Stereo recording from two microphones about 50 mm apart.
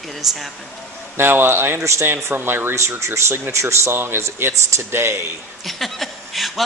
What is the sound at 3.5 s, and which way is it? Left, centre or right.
Speech, right.